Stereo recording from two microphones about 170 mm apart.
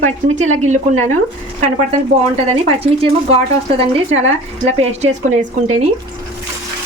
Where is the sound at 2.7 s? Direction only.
35° right (ahead or behind).